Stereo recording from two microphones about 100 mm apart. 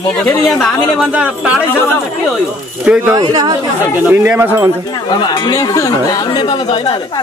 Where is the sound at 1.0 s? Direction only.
10° right (ahead or behind).